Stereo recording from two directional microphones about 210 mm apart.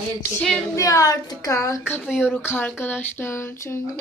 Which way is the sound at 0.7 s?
15° left (ahead or behind).